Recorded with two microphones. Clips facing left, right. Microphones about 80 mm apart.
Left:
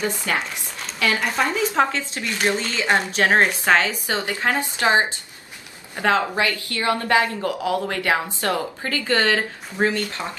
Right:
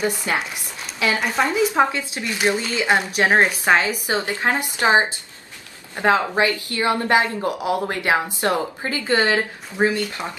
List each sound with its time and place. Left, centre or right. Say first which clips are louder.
0.0 s a woman's voice: right 2 dB; centre
1.2 s speech: right 2 dB; centre
1.7 s a woman's voice: right 1 dB; centre